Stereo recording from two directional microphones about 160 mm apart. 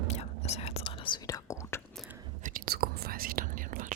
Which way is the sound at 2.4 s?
65° right (ahead or behind).